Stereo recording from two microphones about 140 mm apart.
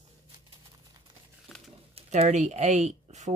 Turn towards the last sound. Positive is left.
turn(degrees=-55)  # may be behind; listen again after turning